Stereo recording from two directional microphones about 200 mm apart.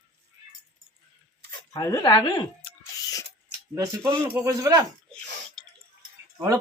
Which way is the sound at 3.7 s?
20° right (ahead or behind).